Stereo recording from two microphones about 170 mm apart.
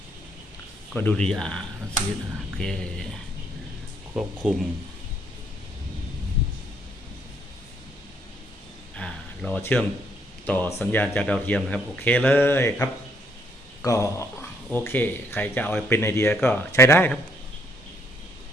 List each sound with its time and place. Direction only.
0.9 s speech: 5° left (ahead or behind)
4.1 s speech: 5° right (ahead or behind)
9.0 s a sound: 5° left (ahead or behind)
10.4 s speech: 10° left (ahead or behind)